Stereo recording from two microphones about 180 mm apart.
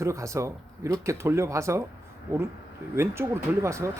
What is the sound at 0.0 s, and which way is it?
Speech, 15° right (ahead or behind).